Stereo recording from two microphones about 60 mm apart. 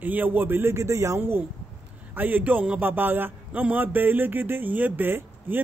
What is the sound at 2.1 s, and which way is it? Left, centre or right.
Speech, right.